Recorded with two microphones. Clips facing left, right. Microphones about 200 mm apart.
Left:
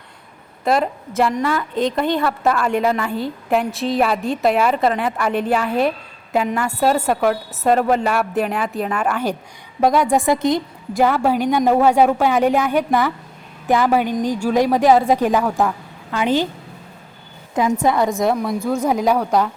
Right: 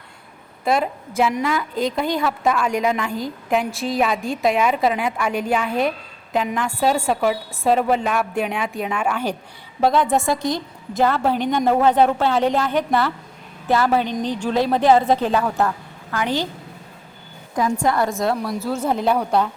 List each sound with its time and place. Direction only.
0.6 s a woman's voice: centre (ahead or behind)
9.8 s a woman's voice: 10° left (ahead or behind)
17.8 s a woman's voice: 20° left (ahead or behind)
18.4 s a woman's voice: 5° right (ahead or behind)
18.9 s a woman's voice: 10° left (ahead or behind)